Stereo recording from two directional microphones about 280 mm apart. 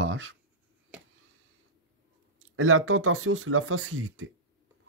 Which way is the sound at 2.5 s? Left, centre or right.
Right.